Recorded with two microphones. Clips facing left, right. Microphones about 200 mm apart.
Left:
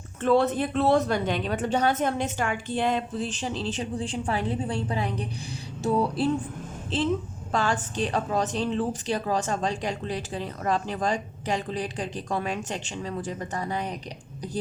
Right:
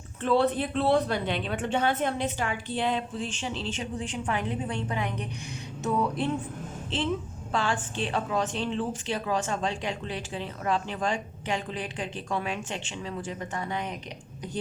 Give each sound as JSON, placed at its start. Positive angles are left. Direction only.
{"t": 0.2, "sound": "a woman's voice", "side_deg": 45}